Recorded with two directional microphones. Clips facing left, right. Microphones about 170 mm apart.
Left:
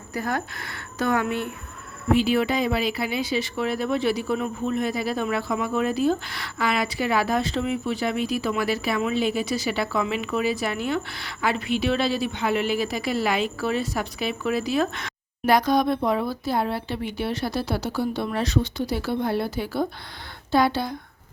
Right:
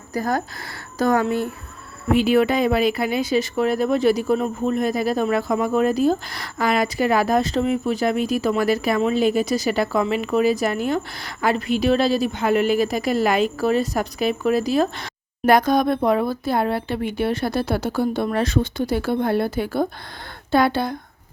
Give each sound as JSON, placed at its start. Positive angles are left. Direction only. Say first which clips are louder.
{"t": 0.1, "sound": "a woman's voice", "louder": "right 4 dB", "side_deg": -40}
{"t": 2.1, "sound": "speech", "louder": "right 5 dB", "side_deg": -55}
{"t": 15.4, "sound": "a woman's voice", "louder": "right 3 dB", "side_deg": -50}